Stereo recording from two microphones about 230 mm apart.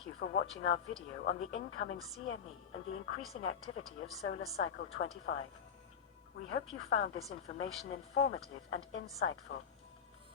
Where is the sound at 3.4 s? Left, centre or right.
Left.